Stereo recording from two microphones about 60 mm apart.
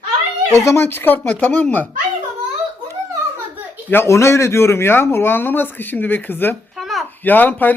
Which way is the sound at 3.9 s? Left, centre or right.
Left.